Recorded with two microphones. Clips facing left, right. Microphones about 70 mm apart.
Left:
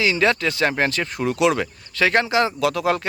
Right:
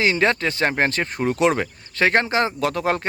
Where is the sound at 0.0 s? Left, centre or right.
Right.